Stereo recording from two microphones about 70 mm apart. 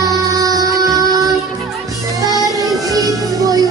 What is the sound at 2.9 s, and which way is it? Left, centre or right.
Music, right.